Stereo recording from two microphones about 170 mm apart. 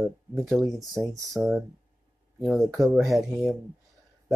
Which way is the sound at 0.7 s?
Centre (ahead or behind).